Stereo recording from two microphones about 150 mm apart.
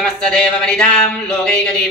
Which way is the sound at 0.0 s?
5° left (ahead or behind).